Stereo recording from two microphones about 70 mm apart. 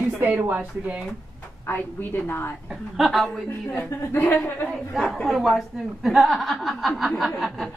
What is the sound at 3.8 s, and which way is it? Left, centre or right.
Speech, left.